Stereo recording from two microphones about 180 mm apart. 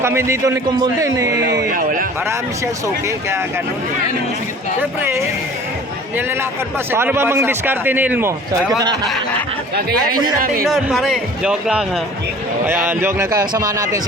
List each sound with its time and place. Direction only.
0.0 s a man's voice: 15° right (ahead or behind)
1.7 s a man's voice: 50° right (ahead or behind)
2.8 s a man's voice: 15° right (ahead or behind)
4.8 s a man's voice: 15° right (ahead or behind)
6.9 s a man's voice: 10° right (ahead or behind)
10.4 s a man's voice: 50° right (ahead or behind)
10.7 s a man's voice: centre (ahead or behind); by 14.0 s 20° right (ahead or behind)